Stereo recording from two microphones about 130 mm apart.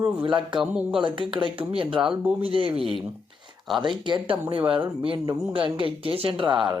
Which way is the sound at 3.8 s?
40° right (ahead or behind).